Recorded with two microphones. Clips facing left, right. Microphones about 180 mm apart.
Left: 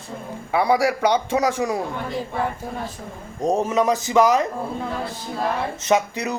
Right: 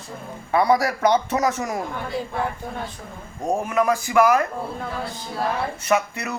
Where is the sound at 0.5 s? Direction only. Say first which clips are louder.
Even; 10° left (ahead or behind).